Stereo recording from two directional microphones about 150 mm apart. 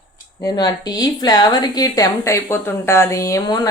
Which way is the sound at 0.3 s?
25° left (ahead or behind).